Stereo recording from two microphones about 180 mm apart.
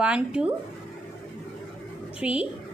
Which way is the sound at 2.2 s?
5° right (ahead or behind).